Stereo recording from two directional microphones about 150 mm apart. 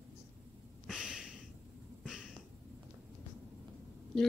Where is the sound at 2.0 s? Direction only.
5° right (ahead or behind).